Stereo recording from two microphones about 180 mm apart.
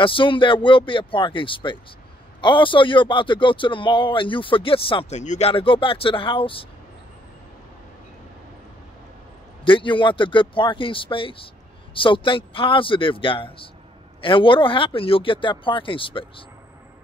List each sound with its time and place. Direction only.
0.0 s speech: 30° left (ahead or behind)
9.7 s speech: 30° left (ahead or behind)